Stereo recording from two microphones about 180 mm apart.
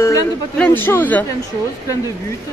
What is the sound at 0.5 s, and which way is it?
Speech, 10° left (ahead or behind).